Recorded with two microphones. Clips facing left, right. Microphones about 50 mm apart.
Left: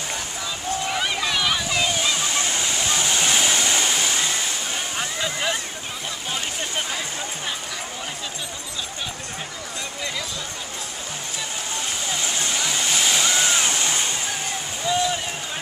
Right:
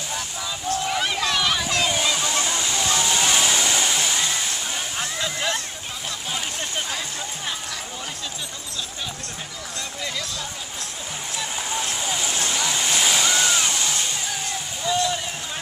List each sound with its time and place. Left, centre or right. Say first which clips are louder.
0.8 s a sound: even; centre
2.9 s waterfall: right 1 dB; centre
4.7 s music: left 1 dB; centre
12.1 s waves: left 1 dB; centre
13.5 s music: left 1 dB; centre
14.9 s a sound: even; centre